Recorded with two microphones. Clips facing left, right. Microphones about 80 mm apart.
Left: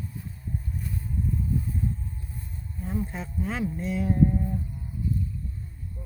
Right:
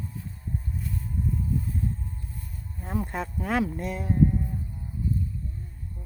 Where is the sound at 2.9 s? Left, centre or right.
Right.